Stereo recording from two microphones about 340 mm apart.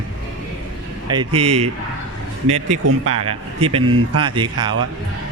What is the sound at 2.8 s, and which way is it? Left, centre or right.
Speech, right.